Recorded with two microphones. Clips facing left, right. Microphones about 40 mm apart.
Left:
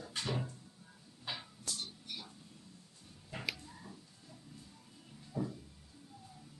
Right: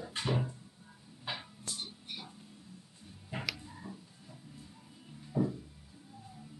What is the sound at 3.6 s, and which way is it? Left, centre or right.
Tick-tock, centre.